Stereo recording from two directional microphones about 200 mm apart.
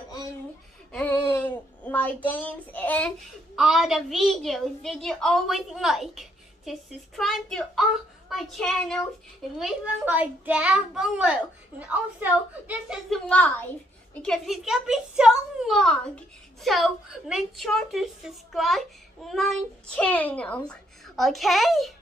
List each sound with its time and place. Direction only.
0.9 s child singing: 10° left (ahead or behind)
3.5 s a woman's voice: centre (ahead or behind)